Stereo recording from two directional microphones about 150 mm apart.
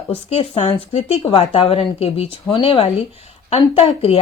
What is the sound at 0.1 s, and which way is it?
A woman's voice, 40° left (ahead or behind).